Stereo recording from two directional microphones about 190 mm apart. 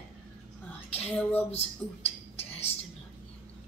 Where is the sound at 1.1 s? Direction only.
10° left (ahead or behind).